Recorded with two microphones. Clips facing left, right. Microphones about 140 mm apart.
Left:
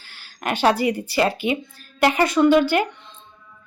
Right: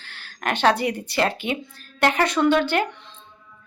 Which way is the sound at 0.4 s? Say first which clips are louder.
Left 1 dB; 5° left (ahead or behind).